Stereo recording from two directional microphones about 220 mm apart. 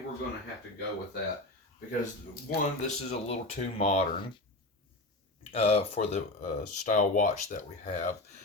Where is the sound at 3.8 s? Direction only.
30° left (ahead or behind).